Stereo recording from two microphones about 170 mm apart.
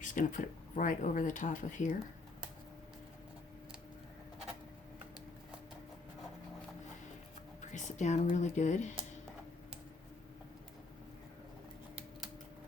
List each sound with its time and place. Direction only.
0.0 s speech: 50° left (ahead or behind)
7.6 s speech: 45° left (ahead or behind)